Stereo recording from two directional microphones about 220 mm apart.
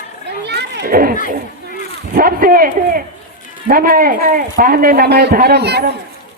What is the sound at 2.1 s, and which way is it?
A child's voice, 40° right (ahead or behind).